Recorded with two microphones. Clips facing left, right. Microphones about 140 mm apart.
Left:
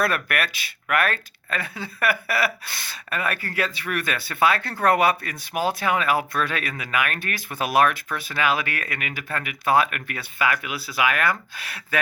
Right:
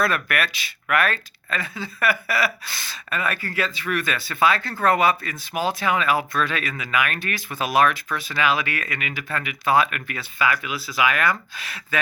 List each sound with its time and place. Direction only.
0.0 s speech: 55° left (ahead or behind)